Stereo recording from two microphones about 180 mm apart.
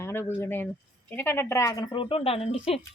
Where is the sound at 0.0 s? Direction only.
10° left (ahead or behind).